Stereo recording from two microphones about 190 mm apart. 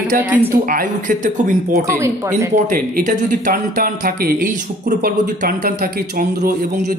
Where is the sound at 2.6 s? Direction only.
45° right (ahead or behind).